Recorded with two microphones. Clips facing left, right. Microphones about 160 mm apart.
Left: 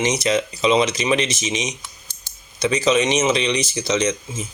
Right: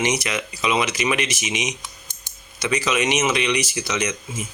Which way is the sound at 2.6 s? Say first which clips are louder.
Left 4 dB; 25° left (ahead or behind).